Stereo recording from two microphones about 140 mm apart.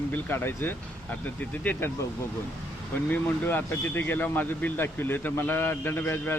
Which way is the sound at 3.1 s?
15° left (ahead or behind).